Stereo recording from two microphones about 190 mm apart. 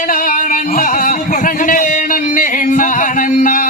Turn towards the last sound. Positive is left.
turn(degrees=45)  # may be behind; listen again after turning